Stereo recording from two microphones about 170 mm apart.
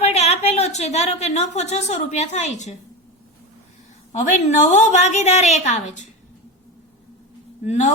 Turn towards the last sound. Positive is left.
turn(degrees=40)  # may be behind; listen again after turning